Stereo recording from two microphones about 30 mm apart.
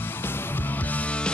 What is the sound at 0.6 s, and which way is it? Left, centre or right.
Music, left.